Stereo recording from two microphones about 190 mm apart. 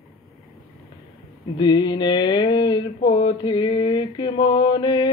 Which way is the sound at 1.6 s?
25° left (ahead or behind).